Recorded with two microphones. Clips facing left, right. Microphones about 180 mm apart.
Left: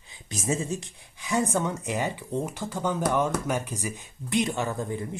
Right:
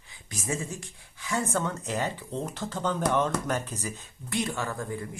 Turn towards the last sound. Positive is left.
turn(degrees=20)  # may be behind; listen again after turning